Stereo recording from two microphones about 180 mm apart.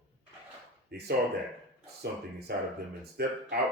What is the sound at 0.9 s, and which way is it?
Speech, 60° right (ahead or behind).